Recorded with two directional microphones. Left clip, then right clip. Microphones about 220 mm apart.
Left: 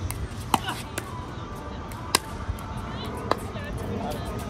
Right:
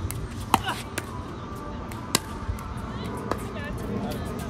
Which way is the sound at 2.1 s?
35° left (ahead or behind).